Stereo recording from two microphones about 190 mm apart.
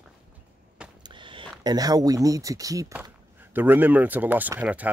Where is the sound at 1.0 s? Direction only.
25° right (ahead or behind); by 4.9 s 5° right (ahead or behind).